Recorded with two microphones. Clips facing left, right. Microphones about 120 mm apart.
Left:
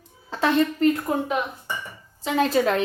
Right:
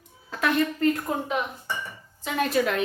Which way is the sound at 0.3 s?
30° left (ahead or behind).